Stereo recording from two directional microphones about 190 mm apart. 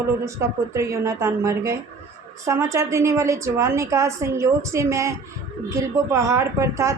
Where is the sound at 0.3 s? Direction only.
15° right (ahead or behind).